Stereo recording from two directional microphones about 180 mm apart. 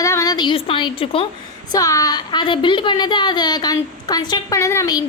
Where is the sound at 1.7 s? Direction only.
20° left (ahead or behind).